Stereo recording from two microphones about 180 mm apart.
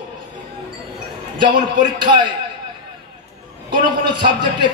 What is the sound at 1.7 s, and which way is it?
Speech, 25° right (ahead or behind).